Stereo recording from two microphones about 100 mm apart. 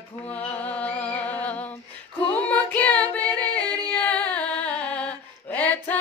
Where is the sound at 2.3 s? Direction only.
15° left (ahead or behind).